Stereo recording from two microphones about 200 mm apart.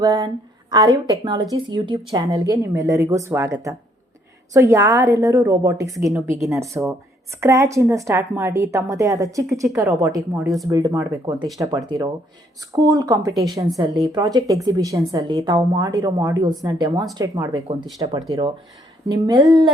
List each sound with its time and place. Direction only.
0.0 s a woman's voice: 20° right (ahead or behind)